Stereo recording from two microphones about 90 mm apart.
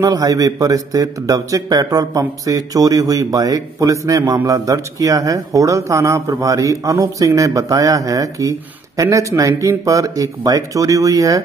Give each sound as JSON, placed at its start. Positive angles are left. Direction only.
{"t": 0.0, "sound": "speech", "side_deg": -40}